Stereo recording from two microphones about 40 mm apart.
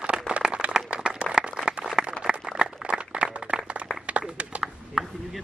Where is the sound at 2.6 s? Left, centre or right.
Right.